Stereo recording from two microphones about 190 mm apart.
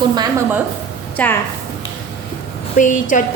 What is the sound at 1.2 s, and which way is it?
Speech, 10° left (ahead or behind).